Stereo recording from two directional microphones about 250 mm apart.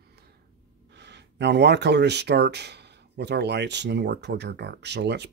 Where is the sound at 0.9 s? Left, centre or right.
Right.